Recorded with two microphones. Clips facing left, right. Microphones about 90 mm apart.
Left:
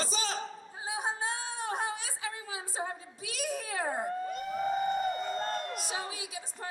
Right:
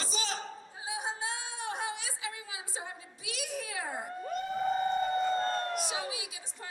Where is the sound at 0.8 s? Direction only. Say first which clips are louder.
Left 3 dB; 40° left (ahead or behind).